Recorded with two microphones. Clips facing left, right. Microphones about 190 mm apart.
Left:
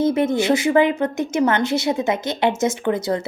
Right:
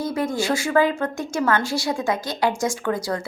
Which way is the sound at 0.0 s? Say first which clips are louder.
Left 6 dB; 25° left (ahead or behind).